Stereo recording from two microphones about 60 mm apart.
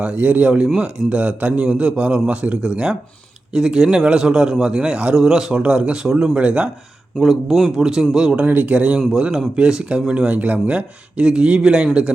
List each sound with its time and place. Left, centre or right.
0.0 s a man's voice: right
7.2 s a man's voice: centre
8.4 s a man's voice: right